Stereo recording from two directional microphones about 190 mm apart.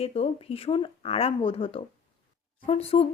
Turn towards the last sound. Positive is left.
turn(degrees=30)  # may be behind; listen again after turning